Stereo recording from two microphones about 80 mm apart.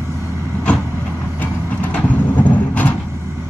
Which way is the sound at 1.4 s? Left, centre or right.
Centre.